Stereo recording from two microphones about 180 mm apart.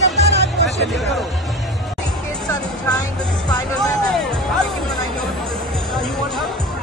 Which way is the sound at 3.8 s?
Centre (ahead or behind).